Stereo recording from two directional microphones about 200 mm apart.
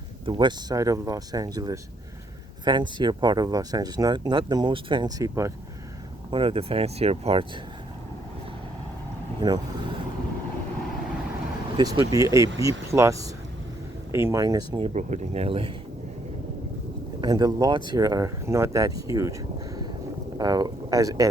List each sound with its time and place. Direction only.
0.3 s speech: 25° right (ahead or behind)
6.3 s speech: 25° right (ahead or behind)
9.4 s speech: 20° right (ahead or behind)
11.8 s speech: 20° right (ahead or behind)
14.9 s speech: 35° right (ahead or behind)
17.2 s speech: 20° right (ahead or behind)